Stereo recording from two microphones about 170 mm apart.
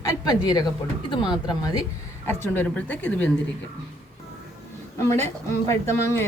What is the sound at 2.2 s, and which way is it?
Speech, 15° left (ahead or behind).